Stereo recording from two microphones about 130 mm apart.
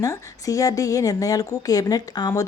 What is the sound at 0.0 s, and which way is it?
A woman's voice, 25° left (ahead or behind).